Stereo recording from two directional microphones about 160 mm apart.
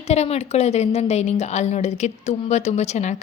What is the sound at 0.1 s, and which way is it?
A woman's voice, 45° left (ahead or behind).